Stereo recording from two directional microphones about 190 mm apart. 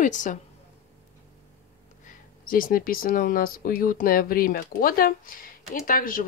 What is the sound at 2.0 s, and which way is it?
Speech, 45° left (ahead or behind).